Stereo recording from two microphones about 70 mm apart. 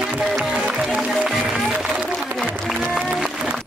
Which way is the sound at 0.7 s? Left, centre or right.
Centre.